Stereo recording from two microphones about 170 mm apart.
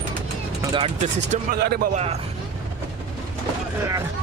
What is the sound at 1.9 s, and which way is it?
Speech, 40° right (ahead or behind).